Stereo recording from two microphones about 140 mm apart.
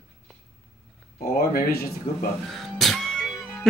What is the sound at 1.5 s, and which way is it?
Speech, 90° left.